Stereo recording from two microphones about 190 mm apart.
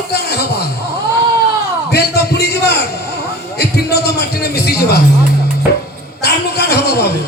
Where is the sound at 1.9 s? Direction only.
60° left (ahead or behind).